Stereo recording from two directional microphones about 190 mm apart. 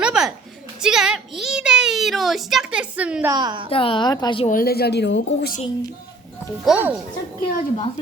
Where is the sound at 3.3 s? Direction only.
25° right (ahead or behind).